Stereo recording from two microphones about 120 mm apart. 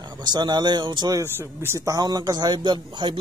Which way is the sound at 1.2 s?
20° right (ahead or behind).